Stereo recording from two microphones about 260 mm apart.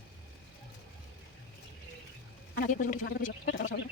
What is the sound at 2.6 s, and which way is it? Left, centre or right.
Speech, left.